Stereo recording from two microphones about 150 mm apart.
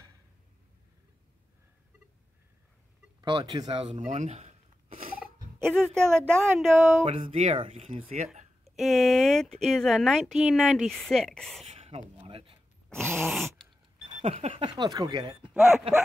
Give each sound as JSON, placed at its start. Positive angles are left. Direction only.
{"t": 3.2, "sound": "speech", "side_deg": -30}
{"t": 3.7, "sound": "speech", "side_deg": -40}
{"t": 4.0, "sound": "a sound", "side_deg": -50}
{"t": 5.2, "sound": "a sound", "side_deg": 5}
{"t": 5.9, "sound": "a woman's voice", "side_deg": -15}
{"t": 7.1, "sound": "speech", "side_deg": -40}
{"t": 8.6, "sound": "speech", "side_deg": 0}
{"t": 11.7, "sound": "a sound", "side_deg": -45}
{"t": 13.2, "sound": "speech", "side_deg": 0}
{"t": 14.2, "sound": "speech", "side_deg": -45}
{"t": 14.6, "sound": "speech", "side_deg": -30}